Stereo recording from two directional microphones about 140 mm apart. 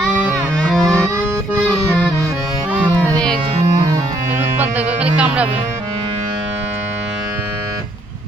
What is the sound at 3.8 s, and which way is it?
Music, 30° right (ahead or behind).